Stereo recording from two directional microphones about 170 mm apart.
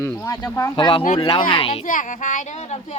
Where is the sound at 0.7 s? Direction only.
30° left (ahead or behind).